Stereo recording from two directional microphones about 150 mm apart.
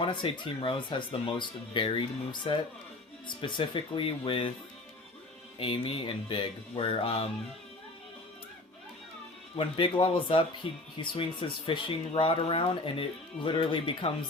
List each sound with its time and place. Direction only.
0.0 s speech: 30° left (ahead or behind)
5.5 s speech: 35° left (ahead or behind)
9.6 s speech: 35° left (ahead or behind)